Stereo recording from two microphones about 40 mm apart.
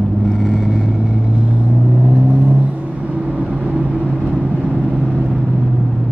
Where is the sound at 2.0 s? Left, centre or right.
Right.